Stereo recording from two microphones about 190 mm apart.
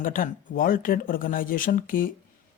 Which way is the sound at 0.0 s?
45° left (ahead or behind).